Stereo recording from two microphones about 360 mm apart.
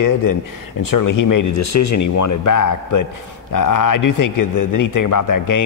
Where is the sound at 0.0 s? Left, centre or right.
Left.